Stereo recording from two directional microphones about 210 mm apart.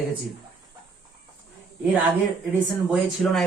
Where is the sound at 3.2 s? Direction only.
Centre (ahead or behind).